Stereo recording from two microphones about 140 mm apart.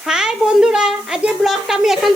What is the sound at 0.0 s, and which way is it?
Speech, 5° right (ahead or behind).